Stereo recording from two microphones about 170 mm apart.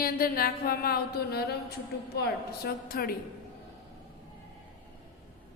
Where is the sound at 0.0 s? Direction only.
60° left (ahead or behind).